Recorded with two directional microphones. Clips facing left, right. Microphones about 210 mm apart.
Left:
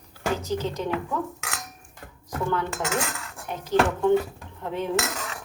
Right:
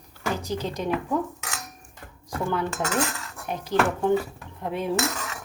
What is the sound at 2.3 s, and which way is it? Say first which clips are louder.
Dishes: even; 10° right (ahead or behind).